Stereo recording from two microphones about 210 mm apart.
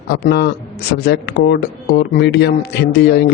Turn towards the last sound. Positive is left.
turn(degrees=55)  # may be behind; listen again after turning